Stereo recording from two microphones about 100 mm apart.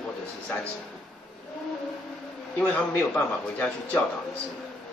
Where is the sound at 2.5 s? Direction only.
15° left (ahead or behind).